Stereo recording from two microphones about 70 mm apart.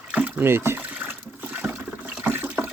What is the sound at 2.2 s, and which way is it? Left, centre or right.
Toilet flush, right.